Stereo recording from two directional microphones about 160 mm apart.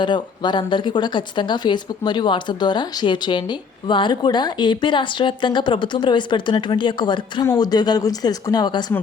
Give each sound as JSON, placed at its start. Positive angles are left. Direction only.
{"t": 0.0, "sound": "speech", "side_deg": 30}